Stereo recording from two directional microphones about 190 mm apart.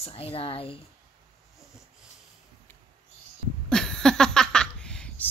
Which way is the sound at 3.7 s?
5° left (ahead or behind).